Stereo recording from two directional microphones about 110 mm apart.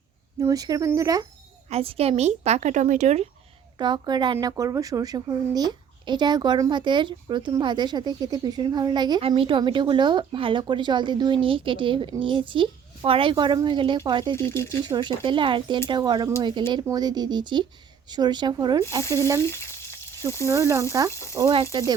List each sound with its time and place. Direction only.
0.3 s speech: 35° right (ahead or behind)
1.7 s a woman's voice: 60° right (ahead or behind); by 3.2 s 90° right
3.8 s speech: 40° right (ahead or behind)
9.2 s speech: 50° right (ahead or behind)
14.3 s speech: 25° left (ahead or behind)
14.8 s speech: 40° right (ahead or behind)
18.8 s speech: 30° right (ahead or behind)
19.5 s frying: 25° left (ahead or behind)
20.5 s speech: 25° right (ahead or behind)
21.1 s speech: 25° left (ahead or behind)
21.5 s speech: 55° right (ahead or behind)